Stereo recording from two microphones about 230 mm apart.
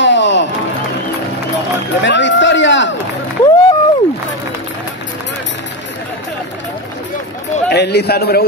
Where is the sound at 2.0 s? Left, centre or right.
Left.